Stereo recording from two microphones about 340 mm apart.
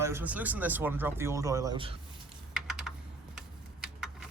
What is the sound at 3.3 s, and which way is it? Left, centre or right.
Tick-tock, centre.